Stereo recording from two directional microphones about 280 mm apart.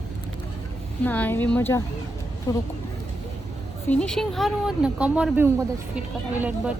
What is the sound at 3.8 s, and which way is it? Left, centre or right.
A woman's voice, centre.